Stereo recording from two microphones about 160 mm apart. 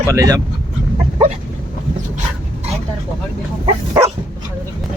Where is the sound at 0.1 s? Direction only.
20° right (ahead or behind).